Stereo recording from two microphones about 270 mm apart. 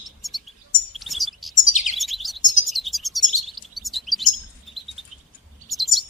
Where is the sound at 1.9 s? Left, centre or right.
Centre.